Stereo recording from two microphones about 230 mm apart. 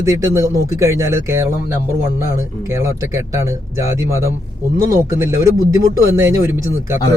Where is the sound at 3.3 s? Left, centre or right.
Centre.